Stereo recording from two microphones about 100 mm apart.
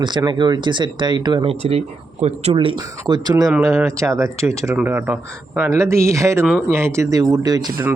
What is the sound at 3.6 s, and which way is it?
Speech, 30° right (ahead or behind).